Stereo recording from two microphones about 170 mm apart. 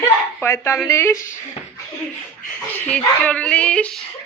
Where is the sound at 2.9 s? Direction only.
10° left (ahead or behind).